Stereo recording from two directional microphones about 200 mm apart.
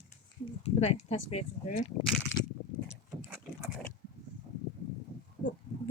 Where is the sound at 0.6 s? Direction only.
35° left (ahead or behind).